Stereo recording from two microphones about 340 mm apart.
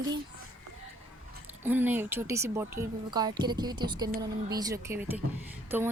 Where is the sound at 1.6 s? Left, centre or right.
Centre.